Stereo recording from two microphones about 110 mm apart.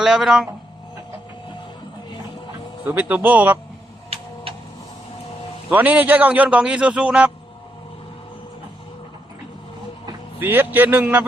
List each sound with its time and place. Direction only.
0.0 s speech: 5° right (ahead or behind)
2.8 s a man's voice: 20° right (ahead or behind)
5.7 s a man's voice: 15° right (ahead or behind)
10.4 s a man's voice: 20° right (ahead or behind)